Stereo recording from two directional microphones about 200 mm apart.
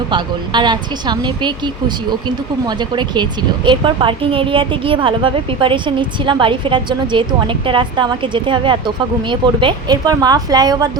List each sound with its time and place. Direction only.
0.1 s speech: 20° right (ahead or behind)
3.7 s speech: 25° right (ahead or behind)